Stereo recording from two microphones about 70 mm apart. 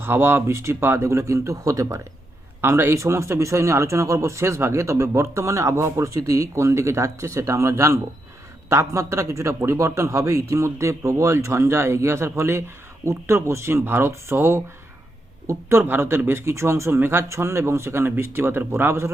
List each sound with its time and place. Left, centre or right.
0.0 s speech: right
2.6 s a man's voice: right
15.8 s speech: right